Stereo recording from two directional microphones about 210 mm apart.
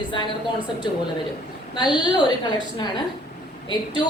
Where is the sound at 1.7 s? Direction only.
20° left (ahead or behind).